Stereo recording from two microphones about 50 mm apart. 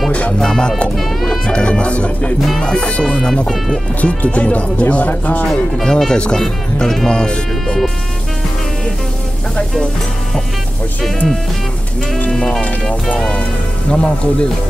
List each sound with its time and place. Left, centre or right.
0.4 s speech: centre
0.9 s music: centre
1.5 s speech: left; by 3.8 s centre
4.0 s speech: left
5.9 s speech: centre
12.3 s speech: centre